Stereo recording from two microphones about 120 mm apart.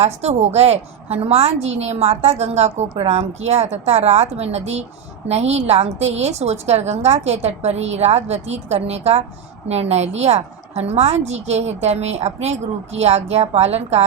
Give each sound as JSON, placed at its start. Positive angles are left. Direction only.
{"t": 0.0, "sound": "a woman's voice", "side_deg": -60}